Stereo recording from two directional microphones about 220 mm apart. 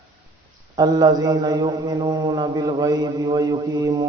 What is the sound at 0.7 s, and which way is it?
A man's voice, 15° right (ahead or behind).